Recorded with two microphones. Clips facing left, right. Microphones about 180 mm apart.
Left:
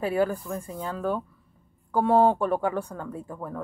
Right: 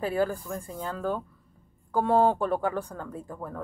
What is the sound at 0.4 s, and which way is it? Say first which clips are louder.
Speech: left 2 dB; 20° left (ahead or behind).